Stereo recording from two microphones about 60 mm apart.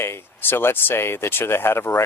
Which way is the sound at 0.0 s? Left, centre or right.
Left.